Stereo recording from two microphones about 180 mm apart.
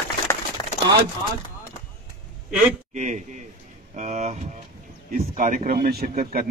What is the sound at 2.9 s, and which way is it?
A man's voice, 45° right (ahead or behind).